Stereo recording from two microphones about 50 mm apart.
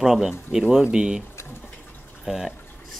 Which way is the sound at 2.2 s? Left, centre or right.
Centre.